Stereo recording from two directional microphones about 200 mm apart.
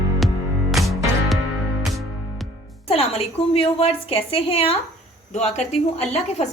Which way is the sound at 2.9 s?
30° left (ahead or behind).